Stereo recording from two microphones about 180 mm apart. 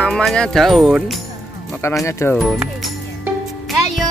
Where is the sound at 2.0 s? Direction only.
15° left (ahead or behind).